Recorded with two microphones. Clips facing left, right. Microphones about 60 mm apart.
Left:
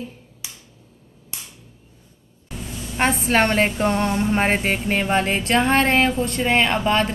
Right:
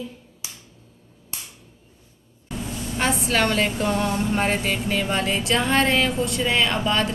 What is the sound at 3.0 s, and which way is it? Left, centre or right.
Music, left.